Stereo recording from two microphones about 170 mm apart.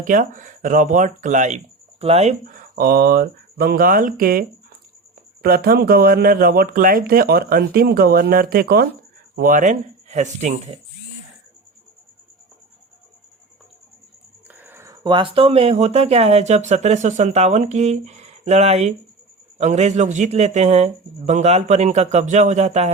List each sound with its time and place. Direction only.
0.0 s speech: 50° right (ahead or behind)
14.4 s a sound: 10° right (ahead or behind)
15.0 s speech: 30° right (ahead or behind)